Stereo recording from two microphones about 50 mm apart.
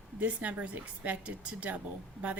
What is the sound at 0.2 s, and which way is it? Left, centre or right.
A woman's voice, right.